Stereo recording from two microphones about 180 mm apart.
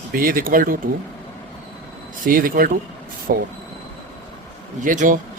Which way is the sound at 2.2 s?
50° right (ahead or behind).